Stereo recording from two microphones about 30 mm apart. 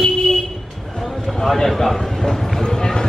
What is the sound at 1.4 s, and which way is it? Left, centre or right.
Speech, centre.